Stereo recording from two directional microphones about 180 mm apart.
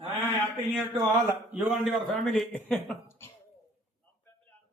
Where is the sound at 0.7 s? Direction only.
5° right (ahead or behind); by 3.3 s 15° left (ahead or behind).